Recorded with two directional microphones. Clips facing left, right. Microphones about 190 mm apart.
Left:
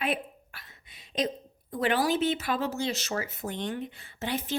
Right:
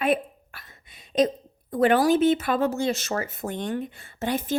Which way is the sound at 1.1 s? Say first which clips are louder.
Right 8 dB; 45° right (ahead or behind).